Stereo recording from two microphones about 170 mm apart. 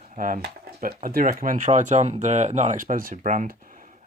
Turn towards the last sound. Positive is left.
turn(degrees=-50)  # may be behind; listen again after turning